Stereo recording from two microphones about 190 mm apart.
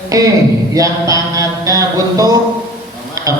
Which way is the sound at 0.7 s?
20° right (ahead or behind).